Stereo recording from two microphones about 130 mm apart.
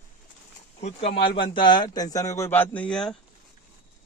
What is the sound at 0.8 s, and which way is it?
A man's voice, 50° left (ahead or behind).